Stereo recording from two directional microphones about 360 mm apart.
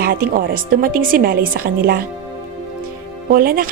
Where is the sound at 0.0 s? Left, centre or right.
Right.